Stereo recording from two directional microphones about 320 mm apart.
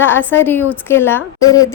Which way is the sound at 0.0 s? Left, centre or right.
Centre.